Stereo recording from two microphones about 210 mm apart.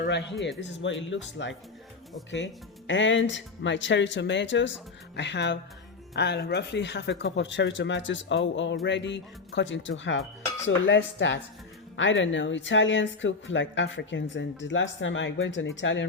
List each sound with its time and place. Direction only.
0.6 s speech: 65° left (ahead or behind)